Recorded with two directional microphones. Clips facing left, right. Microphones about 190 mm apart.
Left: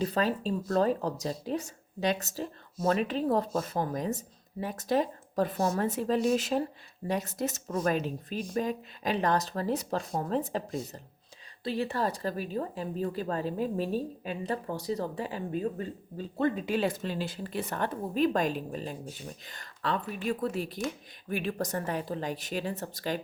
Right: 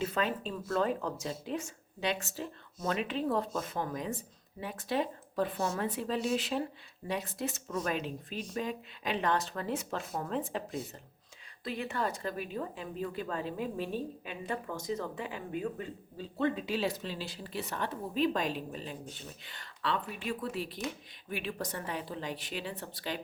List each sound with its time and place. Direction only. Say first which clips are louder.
0.0 s speech: left 4 dB; 35° left (ahead or behind)